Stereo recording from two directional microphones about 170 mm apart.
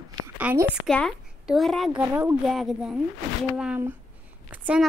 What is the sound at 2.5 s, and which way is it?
A woman's voice, centre (ahead or behind).